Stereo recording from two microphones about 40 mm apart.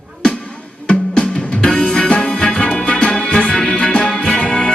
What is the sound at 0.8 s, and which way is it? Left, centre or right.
Music, left.